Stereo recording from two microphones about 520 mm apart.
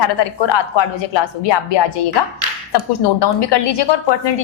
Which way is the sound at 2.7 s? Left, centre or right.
Left.